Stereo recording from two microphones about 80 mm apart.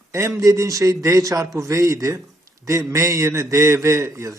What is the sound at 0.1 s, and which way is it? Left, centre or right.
A man's voice, right.